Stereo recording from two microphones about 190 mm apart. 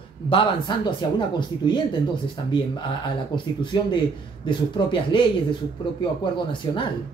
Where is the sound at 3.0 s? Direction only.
25° left (ahead or behind).